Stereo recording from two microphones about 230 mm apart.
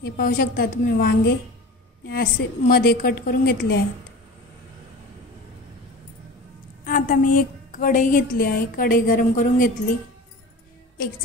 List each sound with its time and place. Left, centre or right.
0.0 s a woman's voice: left
6.8 s a woman's voice: left